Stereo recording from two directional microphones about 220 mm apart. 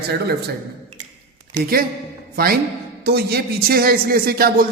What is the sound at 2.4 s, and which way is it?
A man's voice, 40° right (ahead or behind).